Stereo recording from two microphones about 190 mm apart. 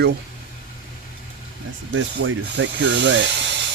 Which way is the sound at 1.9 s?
80° right.